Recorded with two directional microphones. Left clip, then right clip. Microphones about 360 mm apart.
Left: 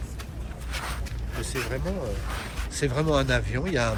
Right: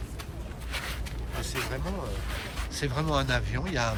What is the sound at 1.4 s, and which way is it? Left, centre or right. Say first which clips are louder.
Speech: left 2 dB; right.